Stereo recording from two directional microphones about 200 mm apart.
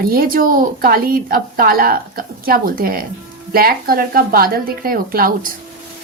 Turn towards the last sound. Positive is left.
turn(degrees=-45)  # may be behind; listen again after turning